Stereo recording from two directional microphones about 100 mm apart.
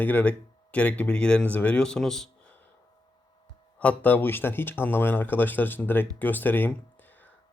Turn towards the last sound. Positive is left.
turn(degrees=15)  # may be behind; listen again after turning